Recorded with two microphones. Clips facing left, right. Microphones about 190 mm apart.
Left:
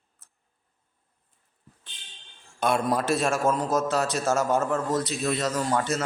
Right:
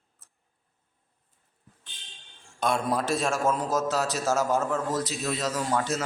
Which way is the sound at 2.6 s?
Centre (ahead or behind).